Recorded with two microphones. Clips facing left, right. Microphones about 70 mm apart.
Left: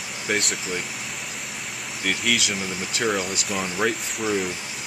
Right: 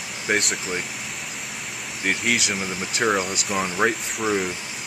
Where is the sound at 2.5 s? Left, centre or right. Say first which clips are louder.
Right 1 dB; right.